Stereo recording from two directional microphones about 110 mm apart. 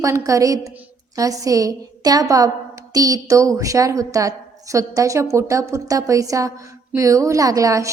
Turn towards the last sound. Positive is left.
turn(degrees=-30)  # may be behind; listen again after turning